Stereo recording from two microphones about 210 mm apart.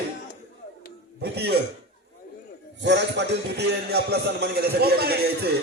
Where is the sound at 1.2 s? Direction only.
50° right (ahead or behind).